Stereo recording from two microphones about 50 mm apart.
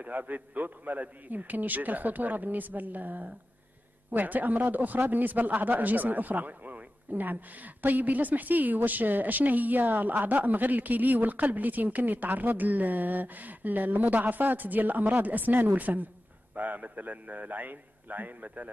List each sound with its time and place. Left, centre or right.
0.0 s a man's voice: right